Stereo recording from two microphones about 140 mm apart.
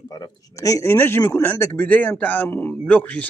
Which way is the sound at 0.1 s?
25° left (ahead or behind).